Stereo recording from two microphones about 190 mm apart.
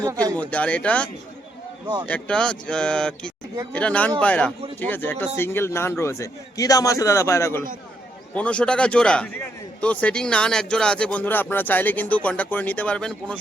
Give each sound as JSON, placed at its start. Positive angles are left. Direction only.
{"t": 0.0, "sound": "speech", "side_deg": -20}
{"t": 0.3, "sound": "a man's voice", "side_deg": 5}